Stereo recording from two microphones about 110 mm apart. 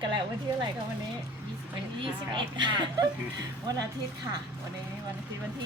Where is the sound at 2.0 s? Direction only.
45° right (ahead or behind).